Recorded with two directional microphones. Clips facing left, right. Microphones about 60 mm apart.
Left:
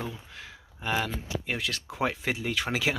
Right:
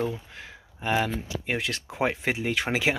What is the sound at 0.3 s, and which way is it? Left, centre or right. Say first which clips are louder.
Speech: right 2 dB; centre.